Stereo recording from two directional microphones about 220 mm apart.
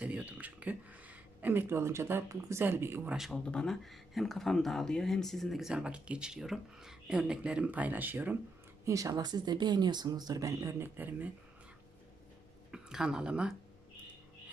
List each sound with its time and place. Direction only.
0.0 s speech: 5° right (ahead or behind)
12.7 s speech: 5° right (ahead or behind)